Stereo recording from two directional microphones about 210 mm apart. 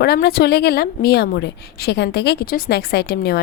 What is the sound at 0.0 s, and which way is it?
A woman's voice, 50° left (ahead or behind).